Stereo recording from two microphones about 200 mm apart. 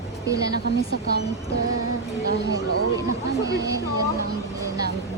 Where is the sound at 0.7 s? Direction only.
55° left (ahead or behind).